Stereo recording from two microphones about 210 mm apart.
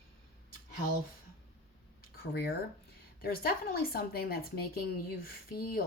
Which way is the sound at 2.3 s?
50° left (ahead or behind).